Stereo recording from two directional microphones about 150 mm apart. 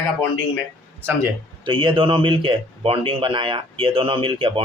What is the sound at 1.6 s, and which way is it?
Speech, 35° right (ahead or behind).